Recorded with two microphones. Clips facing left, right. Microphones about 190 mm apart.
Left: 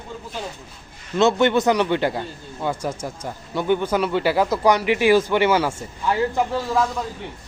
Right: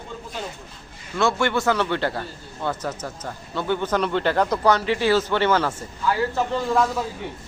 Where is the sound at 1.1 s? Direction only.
20° left (ahead or behind).